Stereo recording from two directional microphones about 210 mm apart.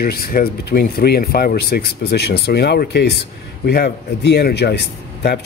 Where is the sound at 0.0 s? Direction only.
45° left (ahead or behind).